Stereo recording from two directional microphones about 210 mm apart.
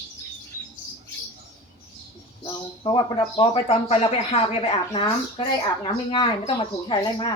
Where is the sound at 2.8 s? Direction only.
25° left (ahead or behind).